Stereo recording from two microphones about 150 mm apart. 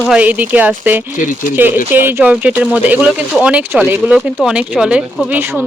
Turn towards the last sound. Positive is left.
turn(degrees=-10)  # may be behind; listen again after turning